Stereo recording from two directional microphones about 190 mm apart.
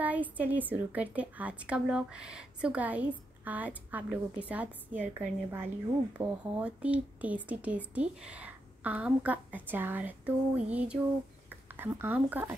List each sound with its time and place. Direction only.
0.0 s a woman's voice: 10° right (ahead or behind)
6.2 s speech: 25° right (ahead or behind)
6.5 s a woman's voice: 5° right (ahead or behind)